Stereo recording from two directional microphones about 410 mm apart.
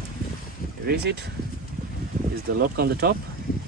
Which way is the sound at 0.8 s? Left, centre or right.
Right.